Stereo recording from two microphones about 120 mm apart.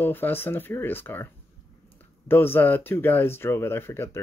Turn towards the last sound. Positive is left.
turn(degrees=20)  # may be behind; listen again after turning